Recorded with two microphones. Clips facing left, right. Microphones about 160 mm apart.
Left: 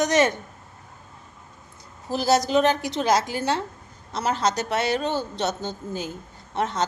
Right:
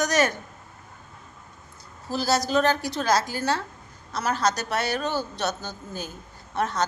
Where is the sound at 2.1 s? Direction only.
20° left (ahead or behind).